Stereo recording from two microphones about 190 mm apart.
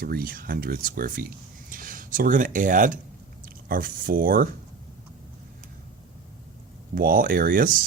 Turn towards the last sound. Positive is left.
turn(degrees=-45)  # may be behind; listen again after turning